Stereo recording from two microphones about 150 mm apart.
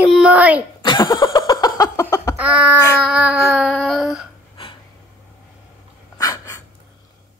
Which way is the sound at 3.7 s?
Centre (ahead or behind).